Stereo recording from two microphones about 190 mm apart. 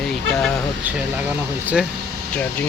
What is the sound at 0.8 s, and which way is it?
Speech, 10° right (ahead or behind).